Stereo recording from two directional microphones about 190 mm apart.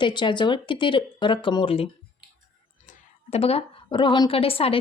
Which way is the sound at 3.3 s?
30° left (ahead or behind).